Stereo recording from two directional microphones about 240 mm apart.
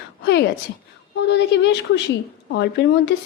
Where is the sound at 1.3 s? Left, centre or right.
Left.